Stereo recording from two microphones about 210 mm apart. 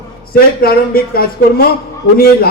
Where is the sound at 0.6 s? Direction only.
45° left (ahead or behind).